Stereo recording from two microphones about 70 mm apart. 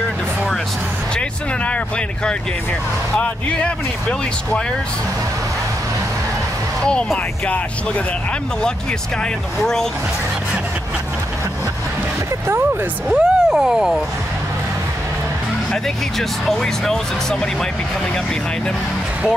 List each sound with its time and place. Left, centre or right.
1.1 s speech: centre
6.8 s speech: centre
9.6 s speech: centre
13.1 s speech: centre
15.7 s speech: centre